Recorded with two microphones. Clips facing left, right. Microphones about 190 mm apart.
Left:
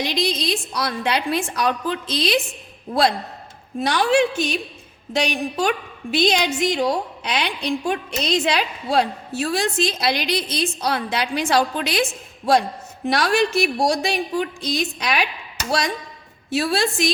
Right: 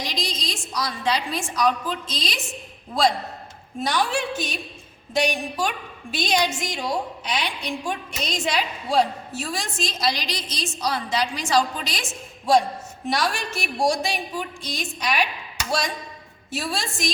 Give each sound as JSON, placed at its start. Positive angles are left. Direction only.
{"t": 0.0, "sound": "a woman's voice", "side_deg": 60}
{"t": 3.8, "sound": "a woman's voice", "side_deg": 65}
{"t": 13.1, "sound": "speech", "side_deg": 65}
{"t": 16.5, "sound": "a woman's voice", "side_deg": 65}